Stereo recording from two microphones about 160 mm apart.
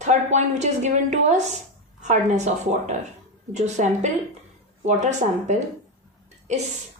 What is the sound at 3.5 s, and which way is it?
Speech, 45° right (ahead or behind).